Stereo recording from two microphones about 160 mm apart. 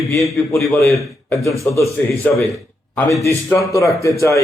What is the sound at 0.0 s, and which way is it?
Speech, centre (ahead or behind).